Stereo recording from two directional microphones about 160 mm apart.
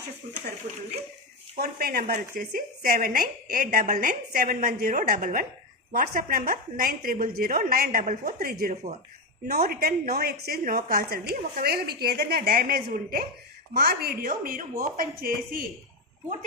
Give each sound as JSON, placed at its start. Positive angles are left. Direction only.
{"t": 1.5, "sound": "speech", "side_deg": -70}
{"t": 4.1, "sound": "a woman's voice", "side_deg": -65}
{"t": 8.7, "sound": "speech", "side_deg": -45}
{"t": 9.5, "sound": "a woman's voice", "side_deg": -75}